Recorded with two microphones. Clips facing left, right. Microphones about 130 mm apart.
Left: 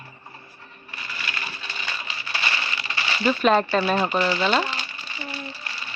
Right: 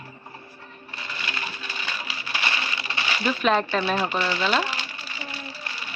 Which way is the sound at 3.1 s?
Centre (ahead or behind).